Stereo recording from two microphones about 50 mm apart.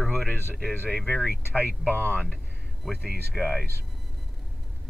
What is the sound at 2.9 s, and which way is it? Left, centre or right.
Speech, centre.